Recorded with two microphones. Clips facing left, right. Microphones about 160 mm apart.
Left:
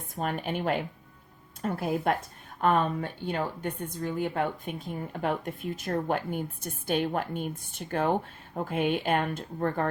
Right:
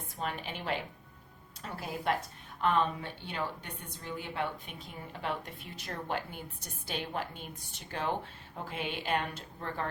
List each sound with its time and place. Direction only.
0.2 s speech: 50° left (ahead or behind)